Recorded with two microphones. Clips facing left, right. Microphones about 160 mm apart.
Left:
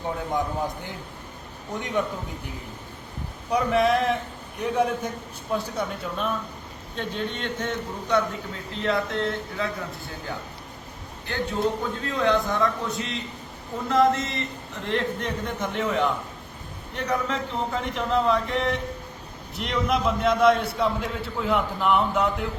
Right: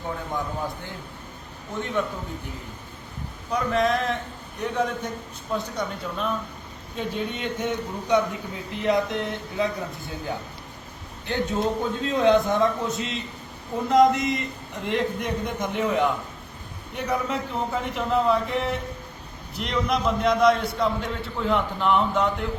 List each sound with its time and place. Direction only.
1.8 s a man's voice: 15° left (ahead or behind)
3.5 s a man's voice: 10° left (ahead or behind); by 9.7 s 20° right (ahead or behind)
11.3 s a man's voice: 20° right (ahead or behind); by 22.4 s centre (ahead or behind)